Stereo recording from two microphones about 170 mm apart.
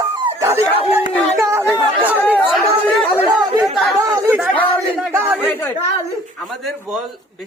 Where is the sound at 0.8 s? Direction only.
30° left (ahead or behind).